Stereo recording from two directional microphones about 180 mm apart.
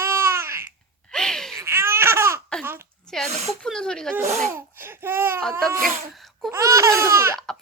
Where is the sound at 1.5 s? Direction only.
15° right (ahead or behind).